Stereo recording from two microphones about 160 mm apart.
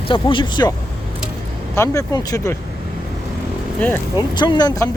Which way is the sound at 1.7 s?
20° left (ahead or behind).